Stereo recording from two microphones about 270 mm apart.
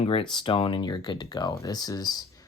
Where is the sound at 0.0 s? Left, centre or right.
Centre.